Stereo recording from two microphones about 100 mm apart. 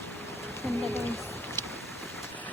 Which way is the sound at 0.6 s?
90° left.